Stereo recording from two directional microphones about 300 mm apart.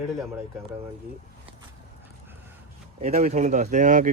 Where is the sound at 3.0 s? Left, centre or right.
Right.